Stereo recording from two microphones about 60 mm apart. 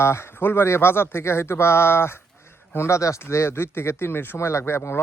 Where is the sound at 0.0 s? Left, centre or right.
Left.